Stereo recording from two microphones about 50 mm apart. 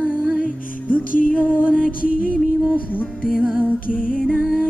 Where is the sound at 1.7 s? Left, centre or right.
Centre.